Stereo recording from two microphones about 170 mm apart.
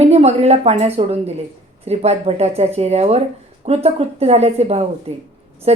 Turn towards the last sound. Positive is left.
turn(degrees=-35)  # may be behind; listen again after turning